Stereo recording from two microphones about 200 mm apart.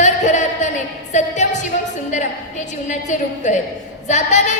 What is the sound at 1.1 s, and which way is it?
Music, 35° left (ahead or behind).